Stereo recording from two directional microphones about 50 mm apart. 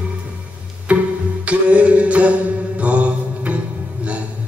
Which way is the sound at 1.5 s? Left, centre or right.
Right.